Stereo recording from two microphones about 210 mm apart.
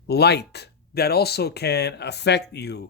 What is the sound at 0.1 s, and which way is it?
Speech, 50° left (ahead or behind).